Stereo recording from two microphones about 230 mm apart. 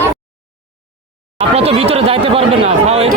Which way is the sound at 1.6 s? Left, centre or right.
Right.